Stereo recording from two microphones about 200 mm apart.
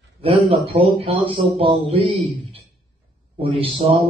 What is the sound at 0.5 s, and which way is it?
A man's voice, 25° right (ahead or behind).